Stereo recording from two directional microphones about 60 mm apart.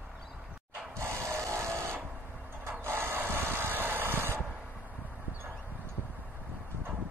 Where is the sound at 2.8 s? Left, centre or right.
Right.